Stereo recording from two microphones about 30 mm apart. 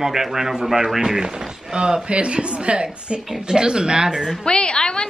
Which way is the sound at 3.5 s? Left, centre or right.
Right.